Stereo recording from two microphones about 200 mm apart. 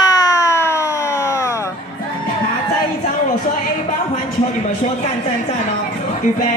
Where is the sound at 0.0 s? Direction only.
20° left (ahead or behind).